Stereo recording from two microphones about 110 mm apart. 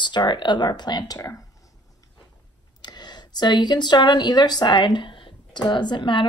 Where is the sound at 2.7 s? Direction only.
40° left (ahead or behind).